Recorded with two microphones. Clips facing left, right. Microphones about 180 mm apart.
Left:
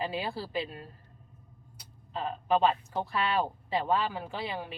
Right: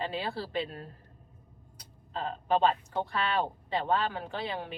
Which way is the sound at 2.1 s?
5° left (ahead or behind).